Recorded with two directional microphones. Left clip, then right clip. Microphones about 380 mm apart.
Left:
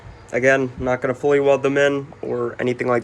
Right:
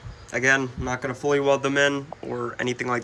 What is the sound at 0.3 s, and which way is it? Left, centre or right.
Speech, centre.